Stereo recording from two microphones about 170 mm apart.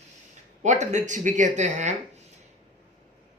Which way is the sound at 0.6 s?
45° right (ahead or behind).